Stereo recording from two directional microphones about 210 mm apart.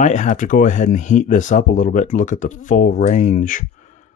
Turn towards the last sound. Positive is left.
turn(degrees=35)  # may be behind; listen again after turning